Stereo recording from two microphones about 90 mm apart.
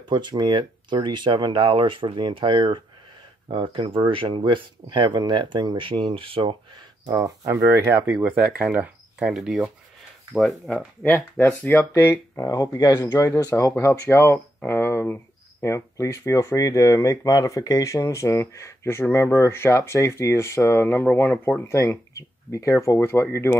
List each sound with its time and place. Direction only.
0.1 s speech: 55° right (ahead or behind); by 6.5 s 80° right
7.1 s speech: 40° right (ahead or behind)
7.5 s speech: 25° right (ahead or behind)
9.2 s speech: 5° right (ahead or behind)
11.1 s speech: 20° left (ahead or behind)
12.5 s speech: 40° left (ahead or behind)